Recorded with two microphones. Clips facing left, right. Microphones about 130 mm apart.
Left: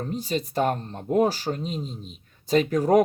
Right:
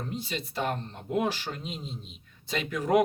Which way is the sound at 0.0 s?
40° left (ahead or behind).